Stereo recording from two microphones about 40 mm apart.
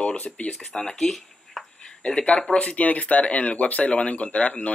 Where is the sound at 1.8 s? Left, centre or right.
Centre.